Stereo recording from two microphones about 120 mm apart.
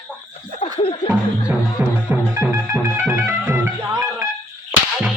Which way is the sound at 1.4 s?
15° right (ahead or behind).